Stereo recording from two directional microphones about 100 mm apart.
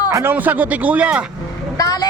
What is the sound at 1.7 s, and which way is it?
Vehicle, 40° left (ahead or behind).